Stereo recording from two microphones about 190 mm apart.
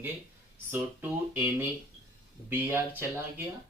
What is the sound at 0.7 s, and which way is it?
Speech, 10° right (ahead or behind).